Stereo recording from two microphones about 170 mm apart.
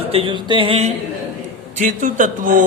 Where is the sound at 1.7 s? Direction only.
50° right (ahead or behind).